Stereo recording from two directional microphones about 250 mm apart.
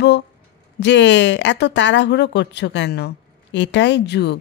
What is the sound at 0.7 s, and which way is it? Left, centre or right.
A woman's voice, left.